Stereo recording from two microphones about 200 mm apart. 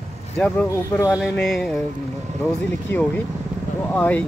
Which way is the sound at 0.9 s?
10° left (ahead or behind).